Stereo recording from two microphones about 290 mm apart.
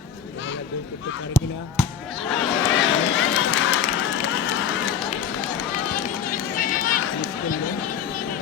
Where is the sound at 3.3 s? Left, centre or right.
Left.